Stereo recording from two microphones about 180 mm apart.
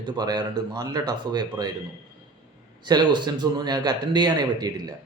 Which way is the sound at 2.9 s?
25° right (ahead or behind).